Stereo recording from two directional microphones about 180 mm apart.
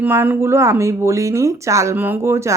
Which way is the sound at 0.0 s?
10° right (ahead or behind).